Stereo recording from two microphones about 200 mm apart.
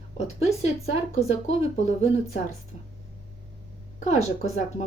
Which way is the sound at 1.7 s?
35° left (ahead or behind).